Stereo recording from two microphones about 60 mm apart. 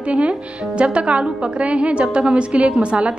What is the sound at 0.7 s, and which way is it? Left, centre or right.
A woman's voice, centre.